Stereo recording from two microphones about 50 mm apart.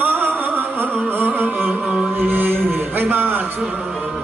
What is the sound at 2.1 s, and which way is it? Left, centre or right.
Mantra, right.